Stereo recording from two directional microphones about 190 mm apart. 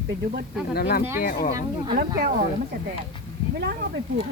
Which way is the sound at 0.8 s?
55° left (ahead or behind).